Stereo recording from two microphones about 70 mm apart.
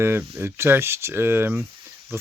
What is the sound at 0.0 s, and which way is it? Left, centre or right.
Speech, right.